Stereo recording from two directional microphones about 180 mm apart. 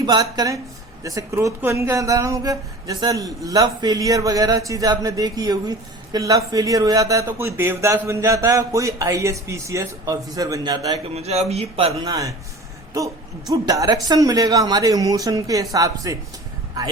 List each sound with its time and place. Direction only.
0.0 s speech: 25° right (ahead or behind)
11.1 s speech: 35° right (ahead or behind)
12.0 s speech: 20° right (ahead or behind)
13.5 s speech: 20° right (ahead or behind)